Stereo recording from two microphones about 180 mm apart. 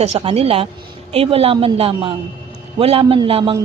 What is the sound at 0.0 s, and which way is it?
A man's voice, 35° right (ahead or behind).